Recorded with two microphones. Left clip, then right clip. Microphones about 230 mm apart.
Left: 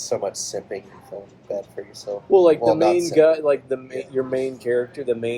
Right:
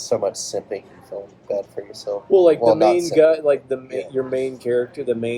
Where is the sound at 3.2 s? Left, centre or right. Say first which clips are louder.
Right 1 dB; centre.